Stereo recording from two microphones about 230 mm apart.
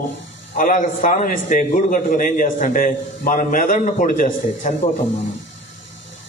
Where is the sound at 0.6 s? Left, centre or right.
Left.